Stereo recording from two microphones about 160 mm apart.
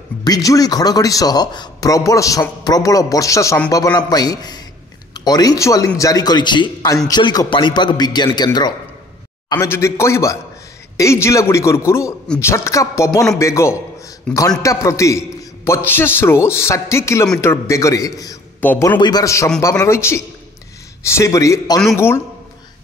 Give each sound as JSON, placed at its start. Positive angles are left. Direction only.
{"t": 0.2, "sound": "speech", "side_deg": 25}
{"t": 9.5, "sound": "a man's voice", "side_deg": 20}
{"t": 14.3, "sound": "a man's voice", "side_deg": 5}
{"t": 14.6, "sound": "a man's voice", "side_deg": 20}
{"t": 18.9, "sound": "a man's voice", "side_deg": 25}